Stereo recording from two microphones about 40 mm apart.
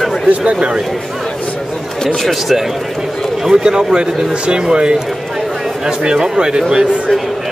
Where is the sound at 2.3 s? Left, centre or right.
Centre.